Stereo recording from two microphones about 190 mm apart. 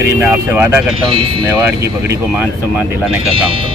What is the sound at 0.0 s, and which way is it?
Speech, 15° right (ahead or behind).